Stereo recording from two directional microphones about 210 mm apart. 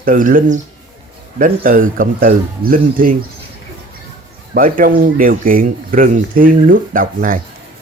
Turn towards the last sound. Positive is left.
turn(degrees=-40)  # may be behind; listen again after turning